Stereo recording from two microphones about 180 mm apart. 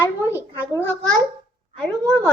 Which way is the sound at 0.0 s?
15° left (ahead or behind).